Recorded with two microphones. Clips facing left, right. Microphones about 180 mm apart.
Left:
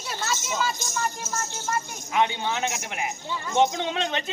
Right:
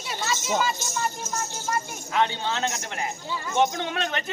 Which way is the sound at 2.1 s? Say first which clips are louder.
Left 1 dB; 15° left (ahead or behind).